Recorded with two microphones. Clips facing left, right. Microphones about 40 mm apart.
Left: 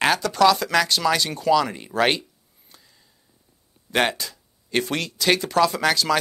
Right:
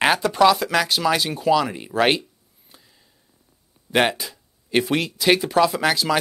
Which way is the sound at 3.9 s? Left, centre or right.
Centre.